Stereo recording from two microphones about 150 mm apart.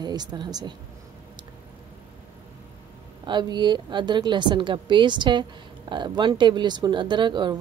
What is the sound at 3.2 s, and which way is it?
Speech, 30° right (ahead or behind).